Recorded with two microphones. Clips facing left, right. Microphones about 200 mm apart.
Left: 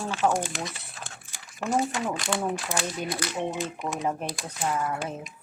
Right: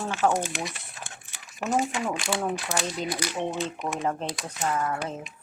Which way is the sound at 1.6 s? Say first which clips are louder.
Even; 20° right (ahead or behind).